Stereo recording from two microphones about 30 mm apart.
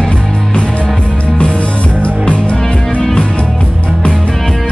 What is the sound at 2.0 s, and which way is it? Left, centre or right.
Music, left.